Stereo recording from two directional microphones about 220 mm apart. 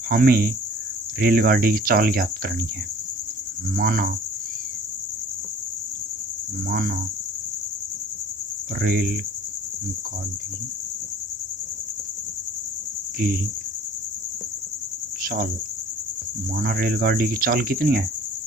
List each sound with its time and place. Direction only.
0.1 s speech: 40° right (ahead or behind)
3.8 s cricket: 40° right (ahead or behind)
6.7 s speech: 40° right (ahead or behind)
8.8 s cricket: 45° right (ahead or behind)
13.1 s cricket: 40° right (ahead or behind)
15.2 s cricket: 40° right (ahead or behind)
16.6 s cricket: 45° right (ahead or behind)